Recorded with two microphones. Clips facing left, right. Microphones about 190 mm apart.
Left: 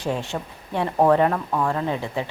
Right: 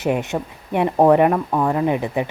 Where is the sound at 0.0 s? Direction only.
20° right (ahead or behind).